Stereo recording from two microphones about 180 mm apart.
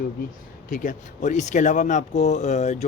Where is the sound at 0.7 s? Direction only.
45° left (ahead or behind).